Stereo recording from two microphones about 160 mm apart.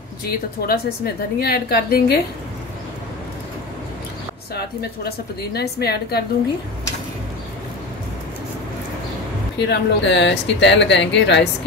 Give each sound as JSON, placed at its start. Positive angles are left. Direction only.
{"t": 0.6, "sound": "a woman's voice", "side_deg": 75}
{"t": 4.6, "sound": "a woman's voice", "side_deg": 80}
{"t": 9.6, "sound": "speech", "side_deg": 90}